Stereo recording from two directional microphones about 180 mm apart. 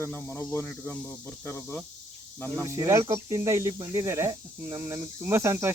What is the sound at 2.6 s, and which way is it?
Speech, 20° right (ahead or behind).